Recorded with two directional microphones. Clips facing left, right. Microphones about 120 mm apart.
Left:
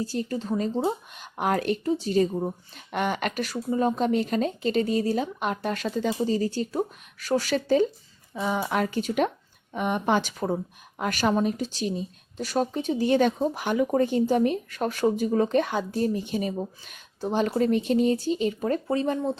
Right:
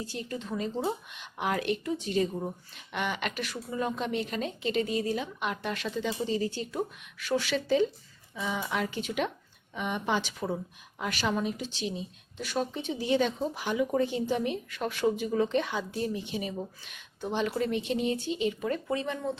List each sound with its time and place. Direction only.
0.0 s speech: 35° left (ahead or behind)